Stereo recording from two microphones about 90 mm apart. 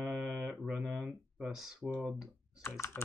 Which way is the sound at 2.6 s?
30° left (ahead or behind).